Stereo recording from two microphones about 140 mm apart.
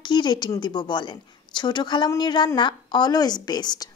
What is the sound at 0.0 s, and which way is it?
A woman's voice, 30° left (ahead or behind).